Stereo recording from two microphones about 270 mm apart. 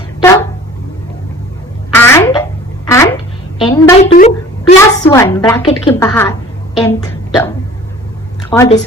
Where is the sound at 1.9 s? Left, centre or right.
Centre.